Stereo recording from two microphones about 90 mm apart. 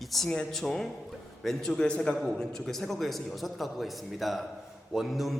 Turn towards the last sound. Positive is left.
turn(degrees=0)  # may be behind; listen again after turning